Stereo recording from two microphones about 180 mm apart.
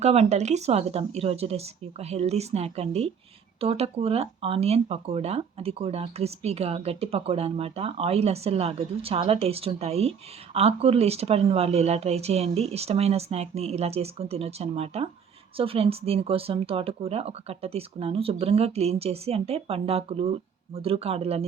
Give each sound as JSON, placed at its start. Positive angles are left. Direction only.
{"t": 0.0, "sound": "speech", "side_deg": -35}